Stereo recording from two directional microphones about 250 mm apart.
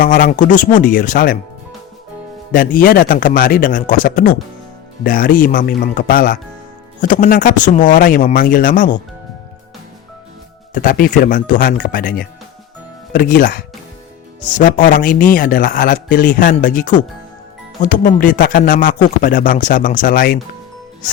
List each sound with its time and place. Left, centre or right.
0.0 s speech: left
2.5 s speech: left
10.8 s speech: left
14.6 s speech: left